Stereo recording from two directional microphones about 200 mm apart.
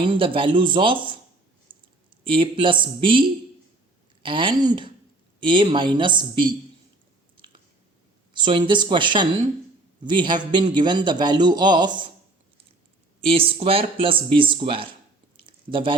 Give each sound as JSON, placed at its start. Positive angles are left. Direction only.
{"t": 0.0, "sound": "a man's voice", "side_deg": -25}
{"t": 1.7, "sound": "clicking", "side_deg": -25}
{"t": 2.2, "sound": "a man's voice", "side_deg": -25}
{"t": 8.3, "sound": "a man's voice", "side_deg": -25}
{"t": 13.2, "sound": "a man's voice", "side_deg": -30}
{"t": 15.4, "sound": "a sound", "side_deg": -25}